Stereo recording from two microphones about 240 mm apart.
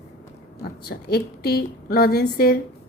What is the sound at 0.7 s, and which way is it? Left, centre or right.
A woman's voice, left.